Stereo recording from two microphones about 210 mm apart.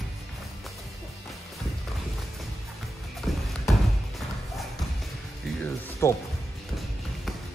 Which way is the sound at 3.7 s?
Centre (ahead or behind).